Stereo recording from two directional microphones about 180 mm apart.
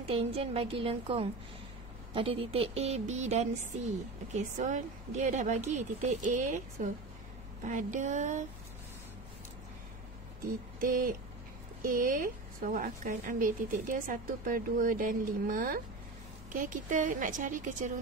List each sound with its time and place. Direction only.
0.1 s speech: 30° right (ahead or behind)
7.6 s a woman's voice: 45° right (ahead or behind)
10.8 s a woman's voice: 50° right (ahead or behind)